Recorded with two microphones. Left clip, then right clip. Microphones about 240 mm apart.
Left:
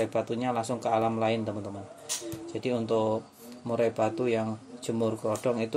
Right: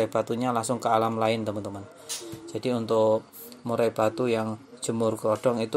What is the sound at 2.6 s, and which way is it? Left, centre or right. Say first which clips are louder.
Speech: right 4 dB; right.